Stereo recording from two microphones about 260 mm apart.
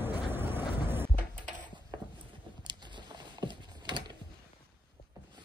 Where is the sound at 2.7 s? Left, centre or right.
Centre.